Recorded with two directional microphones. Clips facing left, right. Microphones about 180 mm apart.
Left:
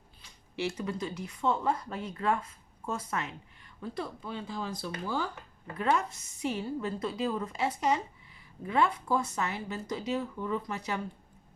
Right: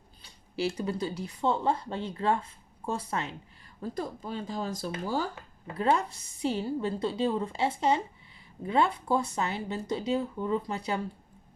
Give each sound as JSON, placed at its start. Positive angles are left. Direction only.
{"t": 0.2, "sound": "speech", "side_deg": -35}
{"t": 3.8, "sound": "speech", "side_deg": -40}